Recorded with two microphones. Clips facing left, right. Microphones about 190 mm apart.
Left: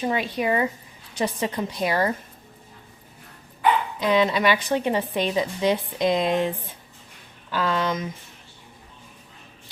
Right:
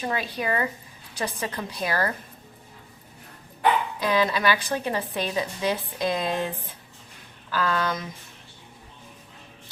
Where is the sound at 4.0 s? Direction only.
25° left (ahead or behind).